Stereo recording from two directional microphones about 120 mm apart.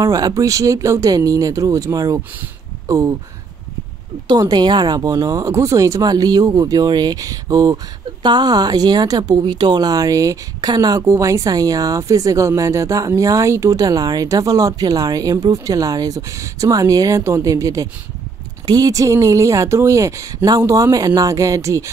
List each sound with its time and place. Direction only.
0.0 s speech: 30° right (ahead or behind)
4.3 s speech: 35° right (ahead or behind)